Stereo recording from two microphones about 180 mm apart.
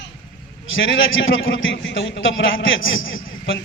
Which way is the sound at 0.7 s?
90° left.